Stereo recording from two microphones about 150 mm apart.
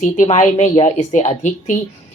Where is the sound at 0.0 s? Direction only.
50° left (ahead or behind).